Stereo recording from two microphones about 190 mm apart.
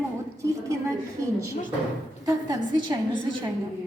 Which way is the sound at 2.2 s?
20° right (ahead or behind).